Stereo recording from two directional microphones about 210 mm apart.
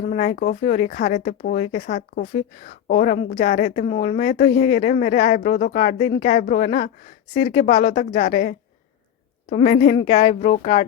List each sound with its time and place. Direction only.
0.0 s speech: 40° left (ahead or behind)
3.8 s speech: 30° left (ahead or behind)